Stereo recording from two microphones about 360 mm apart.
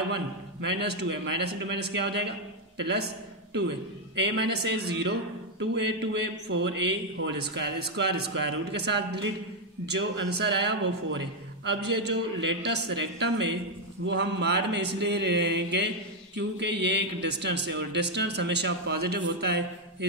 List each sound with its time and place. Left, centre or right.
0.1 s a man's voice: right